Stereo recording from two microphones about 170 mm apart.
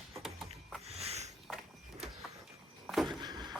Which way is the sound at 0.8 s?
40° right (ahead or behind).